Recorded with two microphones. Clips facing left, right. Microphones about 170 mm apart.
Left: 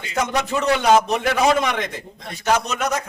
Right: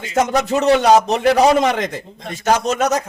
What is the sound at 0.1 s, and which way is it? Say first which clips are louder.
Speech: right 5 dB; 40° right (ahead or behind).